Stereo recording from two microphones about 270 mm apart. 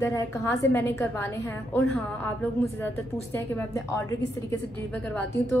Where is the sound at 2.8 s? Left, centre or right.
Centre.